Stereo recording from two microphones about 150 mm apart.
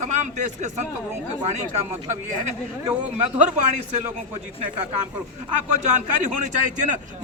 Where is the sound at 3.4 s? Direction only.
50° right (ahead or behind).